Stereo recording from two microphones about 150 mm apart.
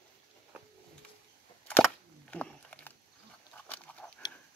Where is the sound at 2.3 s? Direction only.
10° left (ahead or behind).